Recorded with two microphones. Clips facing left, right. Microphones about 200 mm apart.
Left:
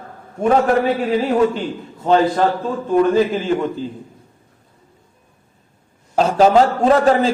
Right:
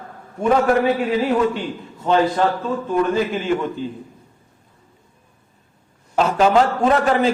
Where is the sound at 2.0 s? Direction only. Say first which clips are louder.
Left 2 dB; 40° left (ahead or behind).